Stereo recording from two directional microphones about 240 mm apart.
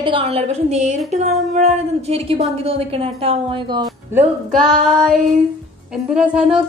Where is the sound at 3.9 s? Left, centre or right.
Centre.